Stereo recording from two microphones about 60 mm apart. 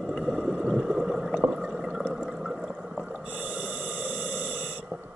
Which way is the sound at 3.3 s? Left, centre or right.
Right.